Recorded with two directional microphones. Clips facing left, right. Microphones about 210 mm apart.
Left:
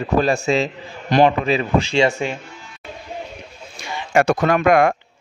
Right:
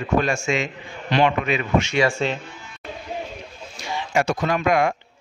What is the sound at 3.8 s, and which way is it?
Speech, 55° left (ahead or behind).